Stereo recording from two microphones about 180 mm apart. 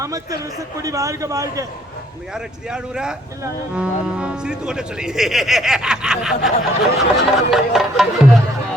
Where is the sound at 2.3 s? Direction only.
5° right (ahead or behind).